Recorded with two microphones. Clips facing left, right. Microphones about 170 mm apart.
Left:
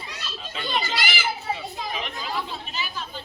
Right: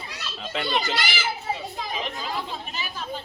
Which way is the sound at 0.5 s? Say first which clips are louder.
Right 3 dB; 70° right (ahead or behind).